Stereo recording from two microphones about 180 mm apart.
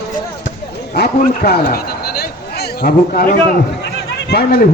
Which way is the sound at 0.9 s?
65° left (ahead or behind).